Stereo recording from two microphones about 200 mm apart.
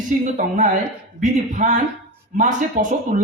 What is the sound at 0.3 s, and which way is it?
Speech, 40° right (ahead or behind).